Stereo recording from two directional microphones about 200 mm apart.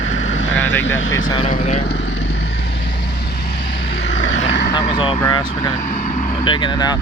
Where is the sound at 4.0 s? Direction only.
65° left (ahead or behind).